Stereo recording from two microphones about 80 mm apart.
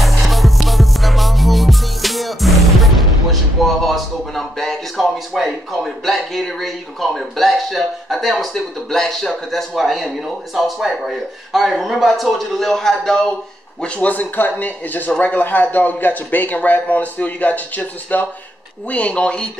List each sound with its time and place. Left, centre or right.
0.0 s music: centre
5.3 s speech: centre